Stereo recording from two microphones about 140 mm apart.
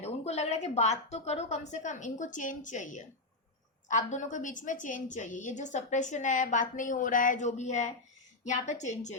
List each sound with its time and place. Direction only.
0.0 s a woman's voice: 50° left (ahead or behind)